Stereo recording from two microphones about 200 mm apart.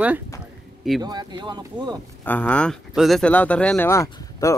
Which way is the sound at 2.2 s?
10° left (ahead or behind).